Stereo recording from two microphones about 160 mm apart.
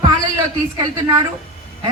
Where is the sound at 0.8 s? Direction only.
25° right (ahead or behind).